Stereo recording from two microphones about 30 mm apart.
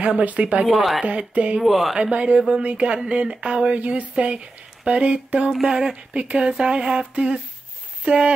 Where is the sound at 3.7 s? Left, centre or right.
Right.